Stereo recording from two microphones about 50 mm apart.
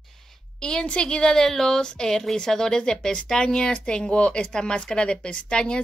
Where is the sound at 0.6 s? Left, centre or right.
Centre.